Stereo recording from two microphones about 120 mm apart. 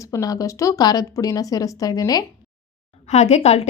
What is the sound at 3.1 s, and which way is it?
Speech, 65° left (ahead or behind).